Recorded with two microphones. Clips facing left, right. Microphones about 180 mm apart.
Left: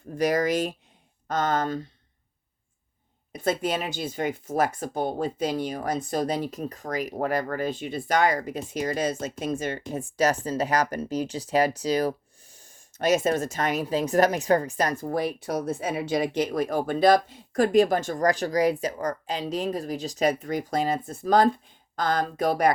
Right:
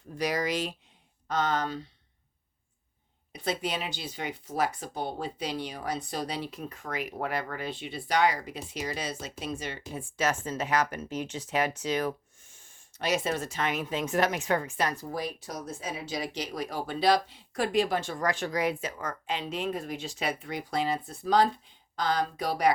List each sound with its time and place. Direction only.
0.1 s speech: 50° left (ahead or behind)
3.3 s speech: 45° left (ahead or behind)